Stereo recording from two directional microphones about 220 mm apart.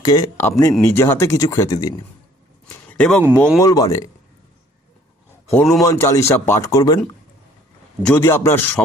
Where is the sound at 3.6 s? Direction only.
15° left (ahead or behind).